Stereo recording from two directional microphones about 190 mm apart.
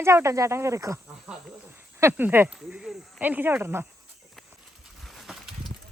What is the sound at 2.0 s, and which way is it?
Speech, 10° right (ahead or behind).